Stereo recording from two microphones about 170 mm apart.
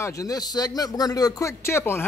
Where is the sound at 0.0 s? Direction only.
20° left (ahead or behind).